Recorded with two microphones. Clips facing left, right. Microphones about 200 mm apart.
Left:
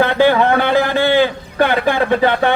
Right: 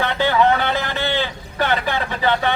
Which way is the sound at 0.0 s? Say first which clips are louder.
Left 5 dB; 55° left (ahead or behind).